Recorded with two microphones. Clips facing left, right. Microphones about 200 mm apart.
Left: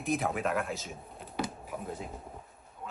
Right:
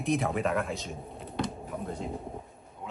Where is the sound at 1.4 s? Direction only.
5° left (ahead or behind).